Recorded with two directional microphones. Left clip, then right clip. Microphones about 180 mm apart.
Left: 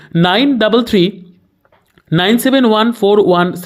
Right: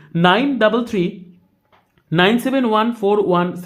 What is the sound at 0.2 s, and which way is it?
Speech, 35° left (ahead or behind).